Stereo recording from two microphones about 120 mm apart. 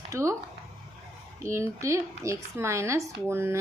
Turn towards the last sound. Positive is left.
turn(degrees=-20)  # may be behind; listen again after turning